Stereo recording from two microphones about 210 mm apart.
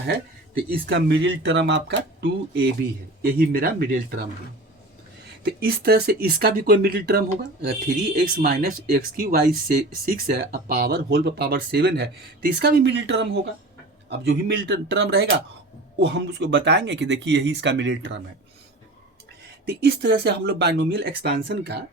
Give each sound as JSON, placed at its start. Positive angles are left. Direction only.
{"t": 0.7, "sound": "speech", "side_deg": -55}
{"t": 5.4, "sound": "speech", "side_deg": -50}
{"t": 19.6, "sound": "speech", "side_deg": -55}